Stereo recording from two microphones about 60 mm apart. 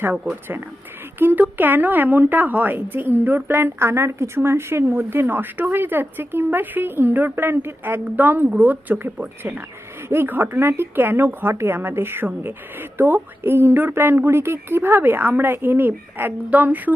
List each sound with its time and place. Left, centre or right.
1.2 s a woman's voice: right